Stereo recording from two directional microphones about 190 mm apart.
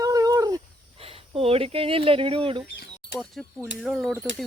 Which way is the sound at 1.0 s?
30° right (ahead or behind).